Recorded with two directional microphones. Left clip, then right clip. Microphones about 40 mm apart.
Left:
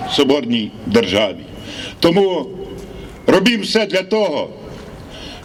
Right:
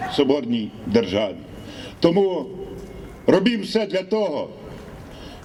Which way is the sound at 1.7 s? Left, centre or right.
Left.